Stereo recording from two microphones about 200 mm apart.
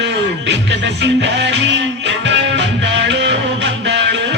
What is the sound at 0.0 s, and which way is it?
Music, 60° right (ahead or behind).